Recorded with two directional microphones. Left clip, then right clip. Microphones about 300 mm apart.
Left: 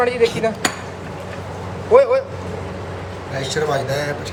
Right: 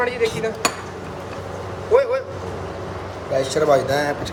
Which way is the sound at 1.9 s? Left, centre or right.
Centre.